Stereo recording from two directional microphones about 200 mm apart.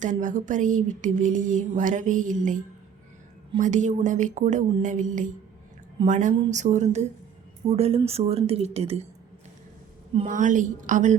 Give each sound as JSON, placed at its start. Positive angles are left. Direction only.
{"t": 0.0, "sound": "speech", "side_deg": -40}
{"t": 10.2, "sound": "speech", "side_deg": -40}